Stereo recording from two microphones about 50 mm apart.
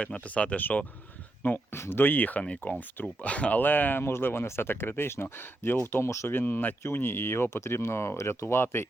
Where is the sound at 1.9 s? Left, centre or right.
Left.